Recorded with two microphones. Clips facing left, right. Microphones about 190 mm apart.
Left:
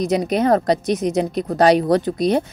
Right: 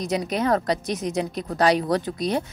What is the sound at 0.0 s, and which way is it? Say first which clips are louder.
Speech: left 6 dB; 60° left (ahead or behind).